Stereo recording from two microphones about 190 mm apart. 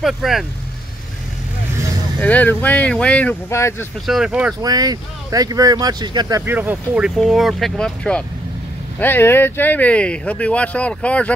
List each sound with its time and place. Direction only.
0.0 s speech: centre (ahead or behind)
2.1 s speech: 10° left (ahead or behind)
4.0 s speech: centre (ahead or behind)
4.6 s speech: 20° right (ahead or behind); by 11.3 s 5° left (ahead or behind)